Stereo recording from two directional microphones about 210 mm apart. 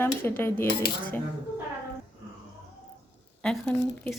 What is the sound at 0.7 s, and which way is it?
Speech, 45° left (ahead or behind).